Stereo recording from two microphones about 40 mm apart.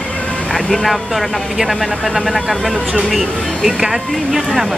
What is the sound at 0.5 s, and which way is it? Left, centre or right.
Speech, centre.